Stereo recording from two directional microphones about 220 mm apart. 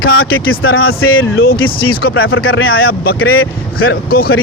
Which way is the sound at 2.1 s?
65° left (ahead or behind).